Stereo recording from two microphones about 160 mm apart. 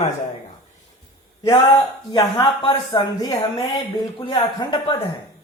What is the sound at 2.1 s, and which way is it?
A woman's voice, 25° left (ahead or behind).